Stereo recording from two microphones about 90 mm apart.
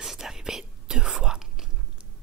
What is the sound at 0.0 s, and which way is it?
Whispering, 5° right (ahead or behind).